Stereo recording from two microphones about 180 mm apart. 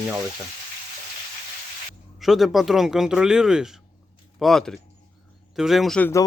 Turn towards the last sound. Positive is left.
turn(degrees=5)  # may be behind; listen again after turning